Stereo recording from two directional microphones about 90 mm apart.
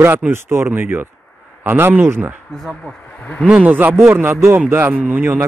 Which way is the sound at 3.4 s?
15° right (ahead or behind).